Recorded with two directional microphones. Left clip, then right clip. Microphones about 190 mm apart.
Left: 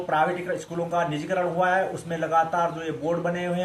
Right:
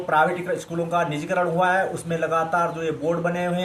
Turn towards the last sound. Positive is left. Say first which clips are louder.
# right 2 dB
turn(degrees=-65)  # may be behind; listen again after turning